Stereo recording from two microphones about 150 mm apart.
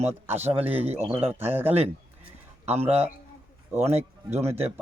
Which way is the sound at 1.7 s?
40° right (ahead or behind).